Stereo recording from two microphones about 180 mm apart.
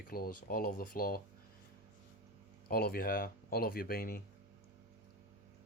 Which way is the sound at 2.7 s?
55° left (ahead or behind).